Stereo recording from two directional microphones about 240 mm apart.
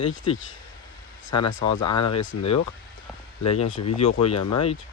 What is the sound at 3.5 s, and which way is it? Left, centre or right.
Speech, left.